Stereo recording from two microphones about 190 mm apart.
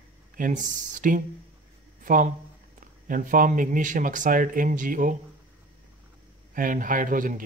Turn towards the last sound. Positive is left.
turn(degrees=-45)  # may be behind; listen again after turning